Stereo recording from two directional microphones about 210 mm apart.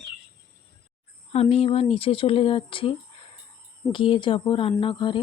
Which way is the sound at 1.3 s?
30° left (ahead or behind).